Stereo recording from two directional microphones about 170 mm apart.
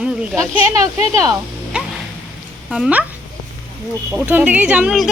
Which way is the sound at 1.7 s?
5° right (ahead or behind).